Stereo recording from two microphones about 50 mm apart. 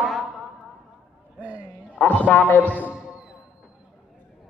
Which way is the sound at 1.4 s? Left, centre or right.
Right.